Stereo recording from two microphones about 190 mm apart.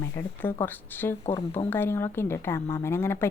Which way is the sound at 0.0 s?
10° left (ahead or behind).